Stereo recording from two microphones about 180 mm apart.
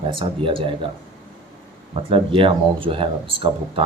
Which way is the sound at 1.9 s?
30° right (ahead or behind).